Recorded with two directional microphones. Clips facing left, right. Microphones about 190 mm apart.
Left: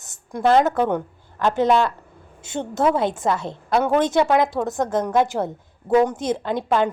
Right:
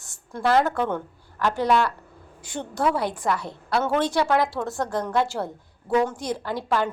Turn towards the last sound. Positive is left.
turn(degrees=20)  # may be behind; listen again after turning